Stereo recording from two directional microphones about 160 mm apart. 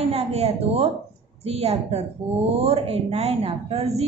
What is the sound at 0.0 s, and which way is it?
A woman's voice, 40° right (ahead or behind).